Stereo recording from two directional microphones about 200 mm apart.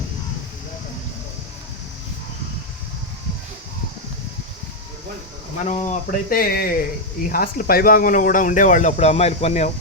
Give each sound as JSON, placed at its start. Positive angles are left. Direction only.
{"t": 5.6, "sound": "speech", "side_deg": 35}